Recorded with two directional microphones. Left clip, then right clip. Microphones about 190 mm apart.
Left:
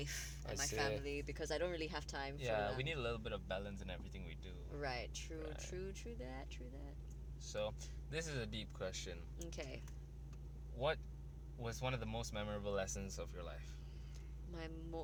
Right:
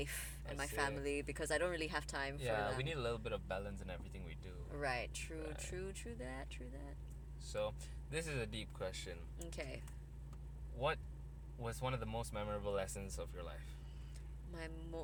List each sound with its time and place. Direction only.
0.0 s speech: 20° right (ahead or behind)
0.8 s speech: 30° right (ahead or behind); by 9.8 s centre (ahead or behind)
10.8 s speech: 15° left (ahead or behind)